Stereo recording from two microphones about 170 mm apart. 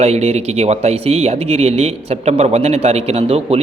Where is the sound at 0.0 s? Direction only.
40° right (ahead or behind).